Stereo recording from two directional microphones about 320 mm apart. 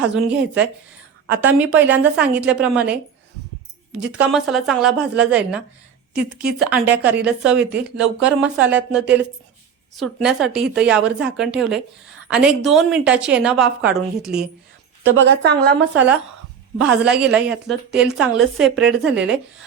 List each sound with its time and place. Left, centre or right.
0.0 s a woman's voice: centre
15.1 s a woman's voice: right
16.8 s a woman's voice: centre